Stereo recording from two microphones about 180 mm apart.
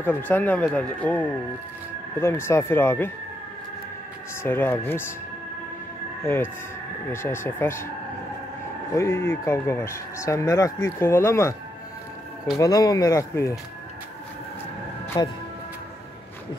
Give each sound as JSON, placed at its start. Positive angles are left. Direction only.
{"t": 0.0, "sound": "speech", "side_deg": 10}
{"t": 4.4, "sound": "speech", "side_deg": 10}
{"t": 6.2, "sound": "speech", "side_deg": 15}
{"t": 8.9, "sound": "speech", "side_deg": 15}
{"t": 12.5, "sound": "speech", "side_deg": 20}
{"t": 15.2, "sound": "speech", "side_deg": 25}